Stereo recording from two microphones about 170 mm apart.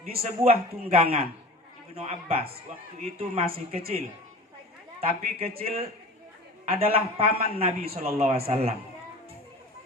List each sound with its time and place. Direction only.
0.2 s a man's voice: 35° right (ahead or behind)
4.9 s a man's voice: 35° right (ahead or behind)